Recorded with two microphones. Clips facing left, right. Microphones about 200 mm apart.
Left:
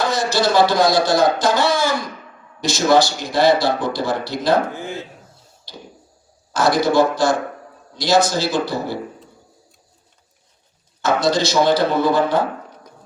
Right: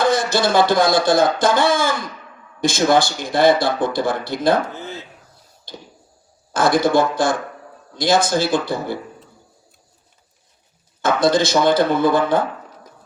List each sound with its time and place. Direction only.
0.0 s speech: 55° right (ahead or behind)
4.7 s speech: 15° left (ahead or behind)
6.5 s speech: 50° right (ahead or behind)
11.0 s speech: 50° right (ahead or behind)